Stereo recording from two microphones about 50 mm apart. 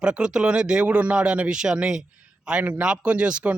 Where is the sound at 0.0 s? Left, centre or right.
Centre.